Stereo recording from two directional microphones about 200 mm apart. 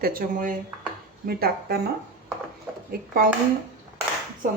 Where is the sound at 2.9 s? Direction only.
45° right (ahead or behind).